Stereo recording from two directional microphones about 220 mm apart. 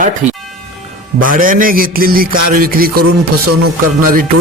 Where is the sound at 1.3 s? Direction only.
40° right (ahead or behind).